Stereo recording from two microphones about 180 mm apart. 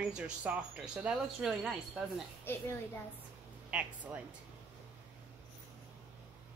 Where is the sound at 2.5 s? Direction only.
10° left (ahead or behind).